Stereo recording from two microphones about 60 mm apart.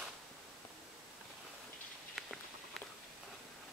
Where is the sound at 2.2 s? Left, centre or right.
Centre.